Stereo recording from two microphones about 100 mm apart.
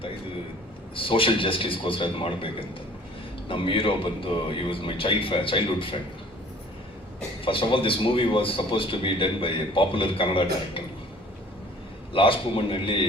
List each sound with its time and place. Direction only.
0.9 s a man's voice: 60° left (ahead or behind)
7.4 s a man's voice: 60° left (ahead or behind)
12.1 s a man's voice: 65° left (ahead or behind)